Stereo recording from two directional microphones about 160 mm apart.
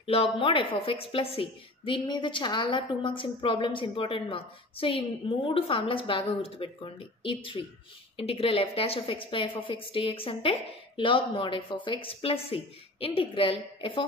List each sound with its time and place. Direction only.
0.0 s a woman's voice: 35° left (ahead or behind)